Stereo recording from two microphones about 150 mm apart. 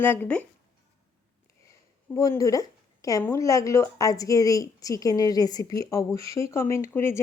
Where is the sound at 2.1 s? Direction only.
20° left (ahead or behind).